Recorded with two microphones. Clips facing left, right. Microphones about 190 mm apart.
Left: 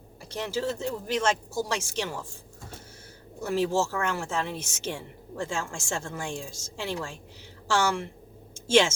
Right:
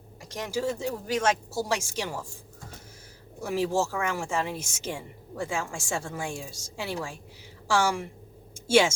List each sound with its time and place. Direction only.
0.5 s speech: 10° right (ahead or behind)
3.4 s speech: 10° right (ahead or behind)